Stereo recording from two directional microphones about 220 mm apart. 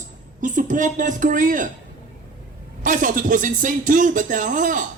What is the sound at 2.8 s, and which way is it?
Speech, 35° right (ahead or behind).